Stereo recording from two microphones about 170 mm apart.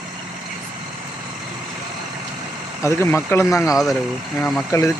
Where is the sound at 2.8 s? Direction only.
15° left (ahead or behind).